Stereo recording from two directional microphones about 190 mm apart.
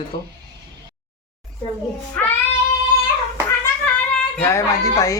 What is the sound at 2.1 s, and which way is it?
Cat, 10° left (ahead or behind).